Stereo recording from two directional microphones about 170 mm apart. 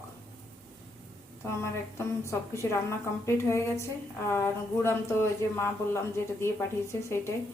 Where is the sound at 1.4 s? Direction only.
15° left (ahead or behind).